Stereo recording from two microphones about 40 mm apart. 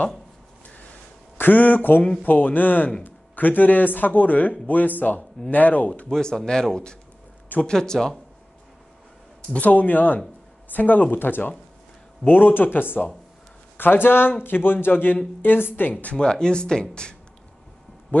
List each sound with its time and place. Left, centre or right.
1.4 s speech: left
6.0 s speech: centre
9.5 s speech: left
14.9 s speech: left
16.2 s speech: left
18.1 s speech: left